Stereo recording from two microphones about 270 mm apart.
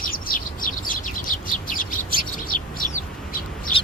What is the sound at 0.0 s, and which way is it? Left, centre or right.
Bird, left.